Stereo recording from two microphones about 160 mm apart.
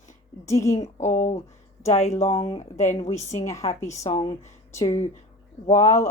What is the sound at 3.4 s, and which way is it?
Speech, 20° left (ahead or behind).